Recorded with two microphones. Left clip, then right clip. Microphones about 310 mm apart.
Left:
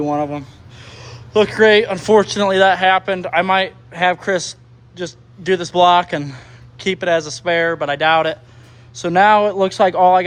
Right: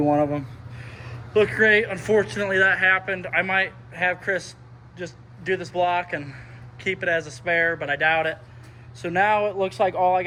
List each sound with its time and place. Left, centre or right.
0.0 s a man's voice: centre
7.4 s speech: left
7.8 s speech: centre
10.0 s speech: left